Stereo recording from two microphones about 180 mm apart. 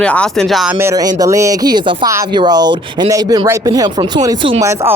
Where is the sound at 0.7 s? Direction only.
15° right (ahead or behind).